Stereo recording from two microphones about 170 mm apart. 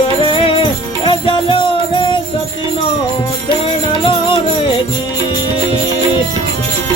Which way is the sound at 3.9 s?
30° left (ahead or behind).